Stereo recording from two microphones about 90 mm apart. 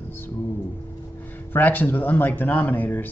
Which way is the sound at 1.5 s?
20° left (ahead or behind).